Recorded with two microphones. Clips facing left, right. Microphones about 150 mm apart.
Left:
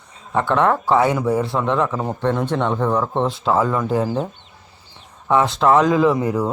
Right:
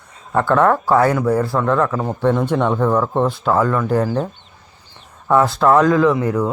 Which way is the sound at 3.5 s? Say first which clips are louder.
Right 1 dB; 10° left (ahead or behind).